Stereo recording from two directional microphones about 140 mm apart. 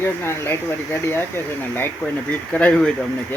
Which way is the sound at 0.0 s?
15° left (ahead or behind).